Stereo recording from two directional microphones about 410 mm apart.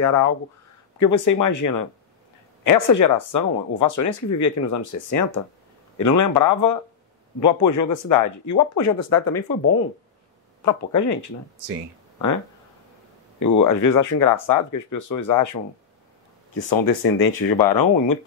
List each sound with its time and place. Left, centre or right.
0.0 s speech: left
13.4 s speech: left
16.5 s speech: left